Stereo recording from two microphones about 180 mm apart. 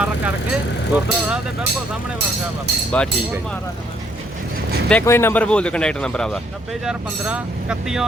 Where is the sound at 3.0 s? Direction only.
5° left (ahead or behind).